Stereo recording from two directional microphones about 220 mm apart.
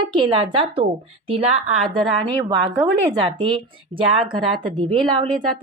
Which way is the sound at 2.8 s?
20° right (ahead or behind).